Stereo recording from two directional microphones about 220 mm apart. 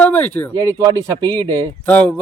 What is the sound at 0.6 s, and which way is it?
Speech, 15° right (ahead or behind).